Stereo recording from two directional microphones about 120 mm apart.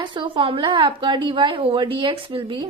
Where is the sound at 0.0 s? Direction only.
45° right (ahead or behind).